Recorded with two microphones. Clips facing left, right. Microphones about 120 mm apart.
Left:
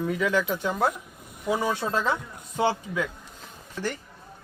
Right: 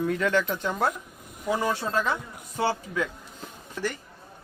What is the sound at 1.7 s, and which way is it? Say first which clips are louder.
Speech: left 1 dB; 20° left (ahead or behind).